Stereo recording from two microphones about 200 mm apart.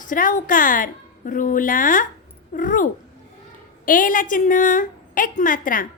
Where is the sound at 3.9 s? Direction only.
45° left (ahead or behind).